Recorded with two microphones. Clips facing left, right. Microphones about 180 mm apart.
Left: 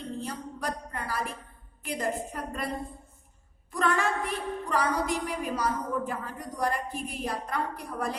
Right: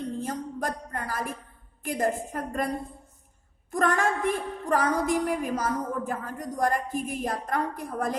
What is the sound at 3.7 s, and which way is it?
A woman's voice, 45° right (ahead or behind).